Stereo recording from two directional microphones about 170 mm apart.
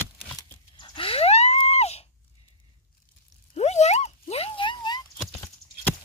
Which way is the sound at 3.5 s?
40° left (ahead or behind).